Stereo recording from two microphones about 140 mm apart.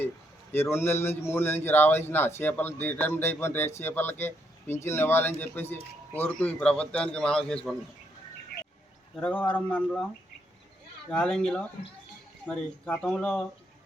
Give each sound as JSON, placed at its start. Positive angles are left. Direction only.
{"t": 0.5, "sound": "a man's voice", "side_deg": 15}
{"t": 9.2, "sound": "a man's voice", "side_deg": 10}
{"t": 11.1, "sound": "a man's voice", "side_deg": 5}